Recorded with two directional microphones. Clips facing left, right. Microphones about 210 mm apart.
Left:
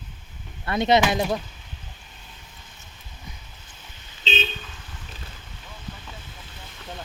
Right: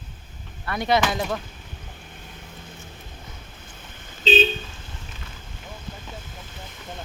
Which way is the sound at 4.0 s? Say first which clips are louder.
Right 10 dB; 50° right (ahead or behind).